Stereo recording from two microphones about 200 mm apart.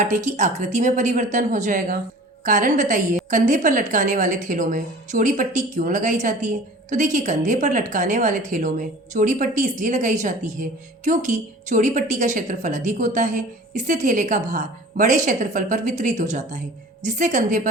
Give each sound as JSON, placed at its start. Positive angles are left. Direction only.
{"t": 0.0, "sound": "a woman's voice", "side_deg": -35}